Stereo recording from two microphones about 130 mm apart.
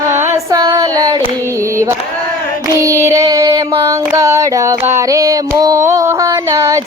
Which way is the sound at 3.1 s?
25° right (ahead or behind).